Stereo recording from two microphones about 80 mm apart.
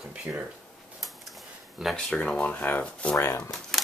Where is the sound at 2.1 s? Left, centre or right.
Centre.